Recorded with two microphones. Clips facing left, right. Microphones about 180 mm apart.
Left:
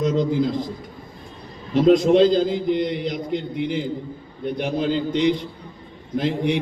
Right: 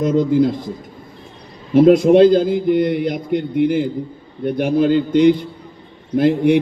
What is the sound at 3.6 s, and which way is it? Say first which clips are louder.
A man's voice: right 8 dB; 55° right (ahead or behind).